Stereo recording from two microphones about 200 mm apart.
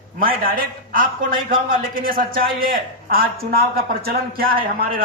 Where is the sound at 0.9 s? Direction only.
45° right (ahead or behind).